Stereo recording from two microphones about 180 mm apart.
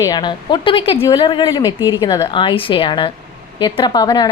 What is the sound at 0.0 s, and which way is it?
A woman's voice, 25° left (ahead or behind).